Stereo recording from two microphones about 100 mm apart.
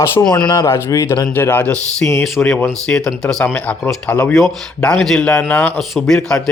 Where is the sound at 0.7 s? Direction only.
30° left (ahead or behind); by 5.4 s 5° left (ahead or behind).